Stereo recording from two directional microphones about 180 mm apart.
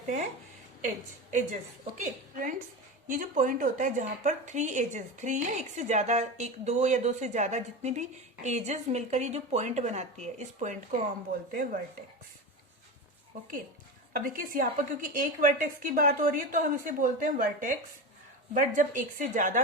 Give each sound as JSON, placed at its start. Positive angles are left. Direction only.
{"t": 0.8, "sound": "a woman's voice", "side_deg": -45}
{"t": 13.3, "sound": "a woman's voice", "side_deg": -50}